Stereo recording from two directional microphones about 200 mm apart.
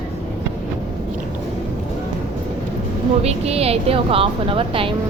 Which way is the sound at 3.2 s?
30° right (ahead or behind).